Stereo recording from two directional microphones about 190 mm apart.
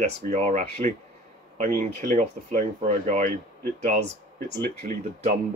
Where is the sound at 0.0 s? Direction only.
40° right (ahead or behind).